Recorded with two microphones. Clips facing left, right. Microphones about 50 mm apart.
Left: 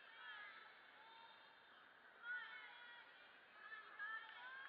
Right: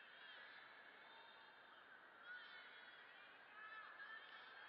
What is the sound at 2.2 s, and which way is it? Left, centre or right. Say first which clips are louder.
Honk: left 8 dB; left.